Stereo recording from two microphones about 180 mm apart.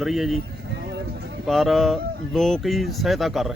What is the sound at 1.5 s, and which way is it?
Speech, centre (ahead or behind).